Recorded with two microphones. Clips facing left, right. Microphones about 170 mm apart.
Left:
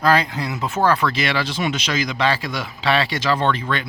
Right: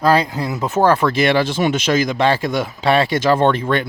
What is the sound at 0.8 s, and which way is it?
Speech, 45° right (ahead or behind).